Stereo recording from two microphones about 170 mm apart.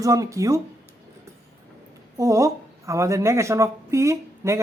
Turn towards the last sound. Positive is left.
turn(degrees=-15)  # may be behind; listen again after turning